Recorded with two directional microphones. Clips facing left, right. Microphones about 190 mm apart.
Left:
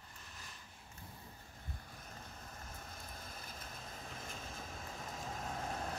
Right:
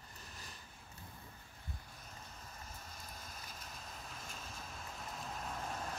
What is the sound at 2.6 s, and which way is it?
Vehicle, 55° left (ahead or behind).